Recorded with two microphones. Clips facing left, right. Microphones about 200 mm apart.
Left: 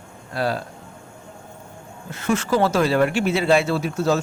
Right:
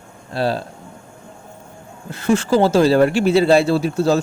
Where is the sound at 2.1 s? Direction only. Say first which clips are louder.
Right 5 dB; 35° right (ahead or behind).